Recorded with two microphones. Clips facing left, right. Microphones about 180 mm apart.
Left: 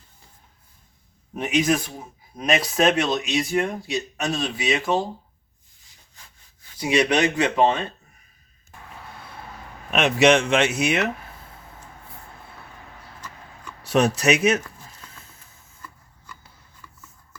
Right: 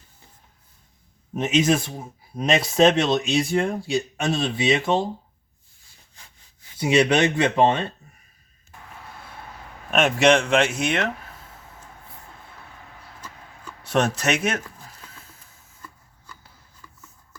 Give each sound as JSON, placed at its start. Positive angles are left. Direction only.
{"t": 1.4, "sound": "speech", "side_deg": -25}
{"t": 6.7, "sound": "speech", "side_deg": -25}
{"t": 9.9, "sound": "speech", "side_deg": 0}
{"t": 13.9, "sound": "speech", "side_deg": 5}